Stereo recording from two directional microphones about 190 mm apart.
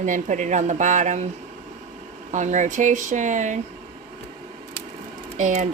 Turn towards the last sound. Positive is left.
turn(degrees=-40)  # may be behind; listen again after turning